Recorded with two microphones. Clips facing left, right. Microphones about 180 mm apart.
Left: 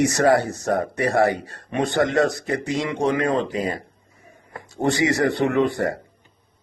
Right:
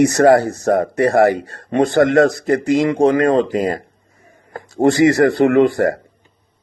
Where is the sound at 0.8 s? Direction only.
90° right.